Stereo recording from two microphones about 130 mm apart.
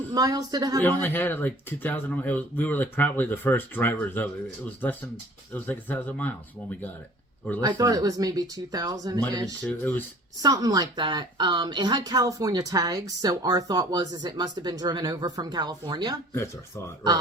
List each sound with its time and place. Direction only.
0.1 s speech: 30° right (ahead or behind)
0.9 s speech: 15° left (ahead or behind)
5.5 s speech: 15° left (ahead or behind)
7.8 s speech: 30° right (ahead or behind)
9.6 s speech: 15° left (ahead or behind)
10.4 s a woman's voice: 30° right (ahead or behind)
16.3 s speech: 20° left (ahead or behind)